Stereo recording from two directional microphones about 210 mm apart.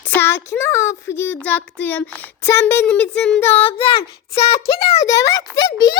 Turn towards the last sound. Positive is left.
turn(degrees=20)  # may be behind; listen again after turning